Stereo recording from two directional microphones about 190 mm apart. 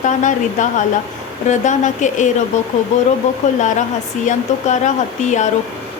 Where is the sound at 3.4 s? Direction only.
40° left (ahead or behind).